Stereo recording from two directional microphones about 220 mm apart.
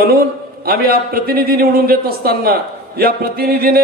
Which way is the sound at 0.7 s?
45° right (ahead or behind).